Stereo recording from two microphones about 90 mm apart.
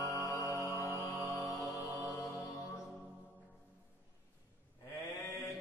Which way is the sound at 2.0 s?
35° left (ahead or behind).